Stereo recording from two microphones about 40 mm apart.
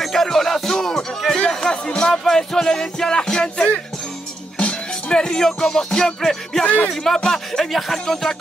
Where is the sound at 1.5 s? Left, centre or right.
Centre.